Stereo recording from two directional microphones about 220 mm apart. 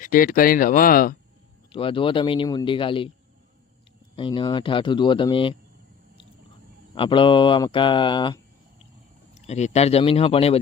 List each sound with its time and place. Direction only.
0.0 s speech: 40° left (ahead or behind)
1.7 s speech: 25° left (ahead or behind)
4.1 s speech: 25° left (ahead or behind)
6.9 s speech: 20° left (ahead or behind)
9.5 s speech: 30° left (ahead or behind)